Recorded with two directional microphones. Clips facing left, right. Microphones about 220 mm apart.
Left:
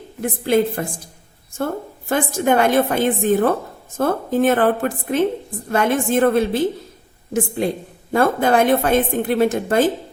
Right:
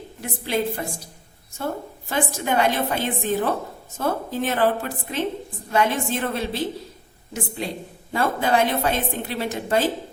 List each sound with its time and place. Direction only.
0.2 s a woman's voice: 50° left (ahead or behind)
2.0 s a woman's voice: 50° left (ahead or behind)